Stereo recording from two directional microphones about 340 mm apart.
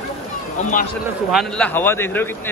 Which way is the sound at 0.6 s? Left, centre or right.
Left.